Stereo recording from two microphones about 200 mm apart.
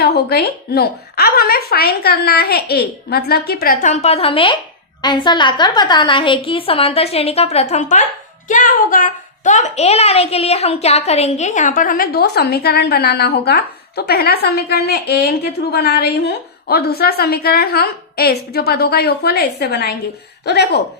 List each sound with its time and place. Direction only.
0.0 s a woman's voice: 50° left (ahead or behind)